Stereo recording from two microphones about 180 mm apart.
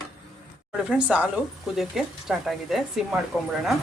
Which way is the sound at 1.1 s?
5° right (ahead or behind).